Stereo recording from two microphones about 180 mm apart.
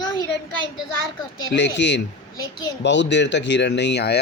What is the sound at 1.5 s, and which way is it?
Speech, 80° left.